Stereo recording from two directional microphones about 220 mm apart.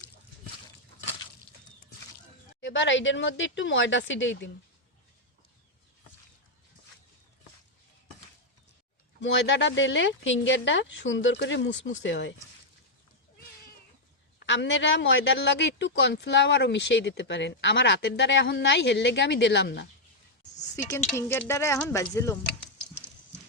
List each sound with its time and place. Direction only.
2.6 s speech: 55° left (ahead or behind)
9.2 s speech: 55° left (ahead or behind)
14.3 s speech: 55° left (ahead or behind)
21.2 s speech: 10° left (ahead or behind)